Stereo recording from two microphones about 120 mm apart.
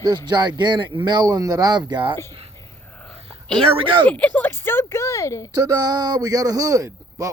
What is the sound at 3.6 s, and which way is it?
Speech, 45° right (ahead or behind).